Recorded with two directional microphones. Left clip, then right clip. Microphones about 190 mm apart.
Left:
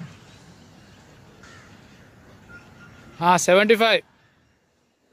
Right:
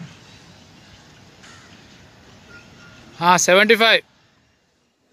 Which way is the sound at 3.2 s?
Centre (ahead or behind).